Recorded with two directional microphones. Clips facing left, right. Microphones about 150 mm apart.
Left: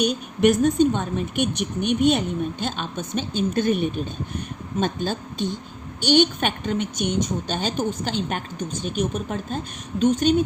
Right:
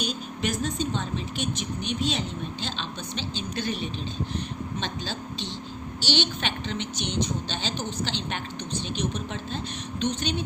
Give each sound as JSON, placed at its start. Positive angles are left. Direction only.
{"t": 0.0, "sound": "a woman's voice", "side_deg": 60}